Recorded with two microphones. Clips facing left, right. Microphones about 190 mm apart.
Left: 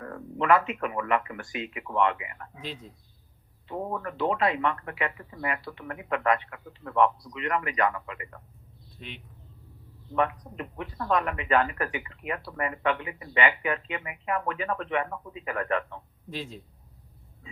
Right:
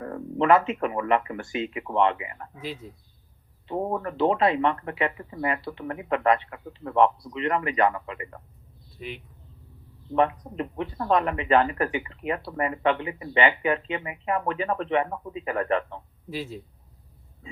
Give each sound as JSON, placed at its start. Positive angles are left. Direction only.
{"t": 0.0, "sound": "speech", "side_deg": -30}
{"t": 2.8, "sound": "a man's voice", "side_deg": -5}
{"t": 3.7, "sound": "speech", "side_deg": -25}
{"t": 9.0, "sound": "speech", "side_deg": -5}
{"t": 10.2, "sound": "speech", "side_deg": -30}
{"t": 16.3, "sound": "a man's voice", "side_deg": -5}